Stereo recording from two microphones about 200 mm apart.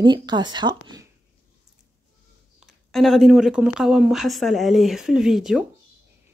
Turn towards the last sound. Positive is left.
turn(degrees=0)  # may be behind; listen again after turning